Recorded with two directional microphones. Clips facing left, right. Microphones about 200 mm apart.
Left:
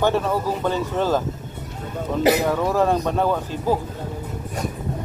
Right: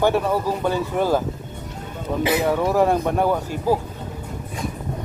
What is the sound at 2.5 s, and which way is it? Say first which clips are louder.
Speech: right 1 dB; 10° right (ahead or behind).